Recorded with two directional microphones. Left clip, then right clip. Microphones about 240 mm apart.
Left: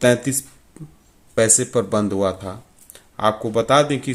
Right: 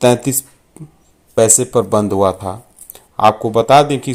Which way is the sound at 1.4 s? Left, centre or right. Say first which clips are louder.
Right 5 dB; centre.